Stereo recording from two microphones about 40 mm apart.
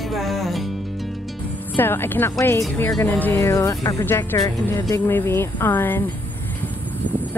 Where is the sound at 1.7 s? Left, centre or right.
Left.